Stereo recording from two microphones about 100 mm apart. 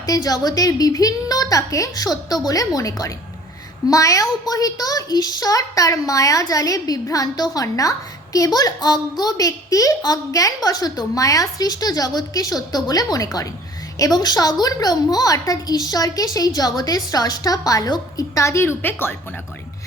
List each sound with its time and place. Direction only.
0.0 s a woman's voice: 40° left (ahead or behind); by 19.1 s 20° left (ahead or behind)